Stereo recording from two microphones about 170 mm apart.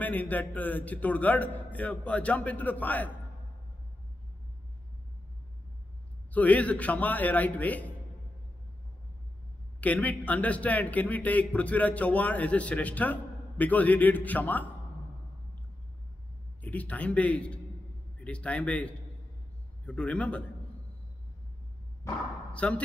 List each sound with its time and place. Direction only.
0.0 s a man's voice: 10° left (ahead or behind)
6.3 s a man's voice: 10° left (ahead or behind)
9.8 s a man's voice: 10° left (ahead or behind)
16.6 s a man's voice: 10° left (ahead or behind)
22.0 s speech: 15° left (ahead or behind)
22.5 s speech: 5° left (ahead or behind)